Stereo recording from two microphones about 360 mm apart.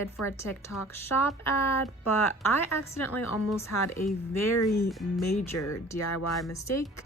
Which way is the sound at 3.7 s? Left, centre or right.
Left.